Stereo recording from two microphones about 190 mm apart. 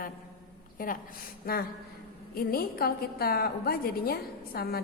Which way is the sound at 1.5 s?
50° left (ahead or behind).